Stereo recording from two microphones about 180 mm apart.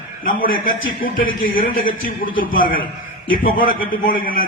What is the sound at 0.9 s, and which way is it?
Speech, 50° left (ahead or behind).